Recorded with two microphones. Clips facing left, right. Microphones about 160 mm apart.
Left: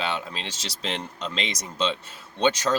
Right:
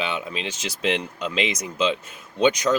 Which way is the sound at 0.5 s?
35° left (ahead or behind).